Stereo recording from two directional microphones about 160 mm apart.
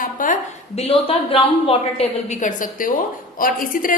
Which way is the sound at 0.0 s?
55° left (ahead or behind).